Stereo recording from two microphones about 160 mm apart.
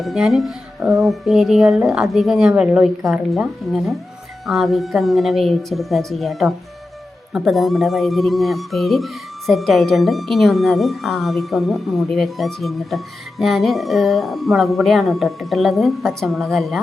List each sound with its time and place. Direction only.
0.0 s speech: centre (ahead or behind)